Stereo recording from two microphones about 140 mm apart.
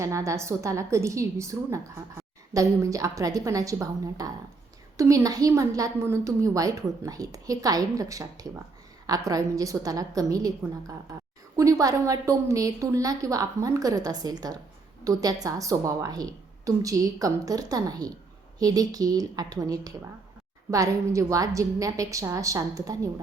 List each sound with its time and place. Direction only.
0.0 s a woman's voice: 20° right (ahead or behind)